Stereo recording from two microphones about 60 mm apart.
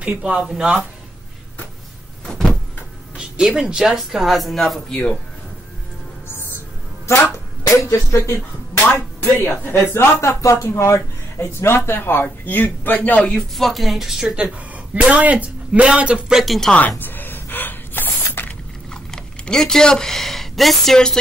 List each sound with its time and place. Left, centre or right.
0.0 s speech: right
0.5 s speech: centre
2.2 s vehicle: centre
3.2 s speech: centre
4.9 s speech: centre
6.3 s music: left
7.7 s speech: left
10.2 s speech: left
13.3 s speech: centre
16.3 s speech: centre
17.0 s gasp: left
19.1 s speech: centre